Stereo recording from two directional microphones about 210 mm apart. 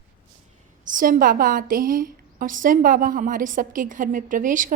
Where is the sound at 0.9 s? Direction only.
40° right (ahead or behind).